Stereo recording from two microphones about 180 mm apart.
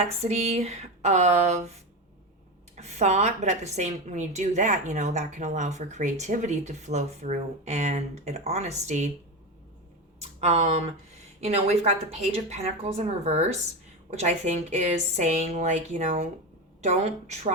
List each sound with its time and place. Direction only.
0.0 s a woman's voice: 35° right (ahead or behind)
2.7 s a woman's voice: 40° right (ahead or behind)
10.2 s a woman's voice: 35° right (ahead or behind)